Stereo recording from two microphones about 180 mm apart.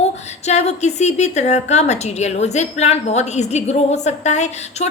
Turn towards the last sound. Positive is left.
turn(degrees=40)  # may be behind; listen again after turning